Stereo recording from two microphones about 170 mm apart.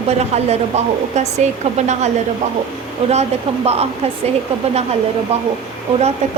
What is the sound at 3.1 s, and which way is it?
Speech, 40° right (ahead or behind).